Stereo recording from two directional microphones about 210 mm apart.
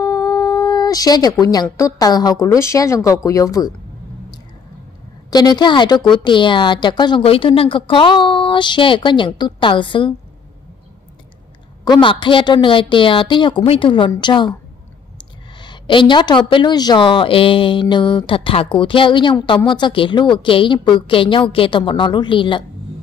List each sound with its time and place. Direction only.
0.0 s speech: 15° left (ahead or behind)
5.3 s speech: 20° left (ahead or behind)
11.8 s speech: 20° left (ahead or behind)
15.6 s speech: 20° left (ahead or behind)